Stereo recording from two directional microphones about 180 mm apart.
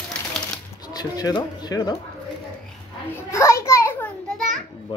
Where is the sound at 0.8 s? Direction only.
20° left (ahead or behind).